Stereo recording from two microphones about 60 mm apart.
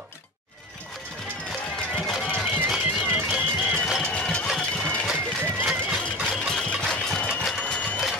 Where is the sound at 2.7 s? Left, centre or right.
Centre.